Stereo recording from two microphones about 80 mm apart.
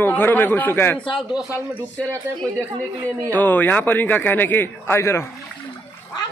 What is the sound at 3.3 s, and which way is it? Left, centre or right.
A man's voice, left.